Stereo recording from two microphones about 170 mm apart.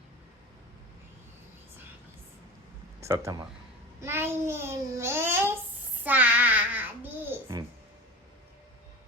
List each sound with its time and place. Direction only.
3.0 s a child's voice: 15° right (ahead or behind)
6.0 s child singing: 10° right (ahead or behind)